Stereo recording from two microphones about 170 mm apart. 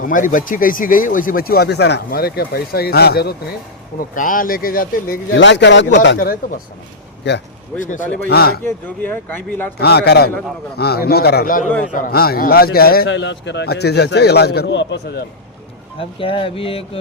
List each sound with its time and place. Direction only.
0.0 s speech: 50° left (ahead or behind); by 3.3 s 70° left (ahead or behind)
4.1 s speech: 50° left (ahead or behind)
7.8 s a man's voice: 50° left (ahead or behind)
8.3 s a man's voice: 65° left (ahead or behind)
9.0 s speech: 10° left (ahead or behind)
9.8 s a man's voice: 70° left (ahead or behind)
16.0 s speech: 30° left (ahead or behind)